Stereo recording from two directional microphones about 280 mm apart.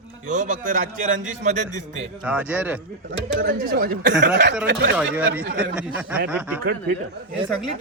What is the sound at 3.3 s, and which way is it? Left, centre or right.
Speech, right.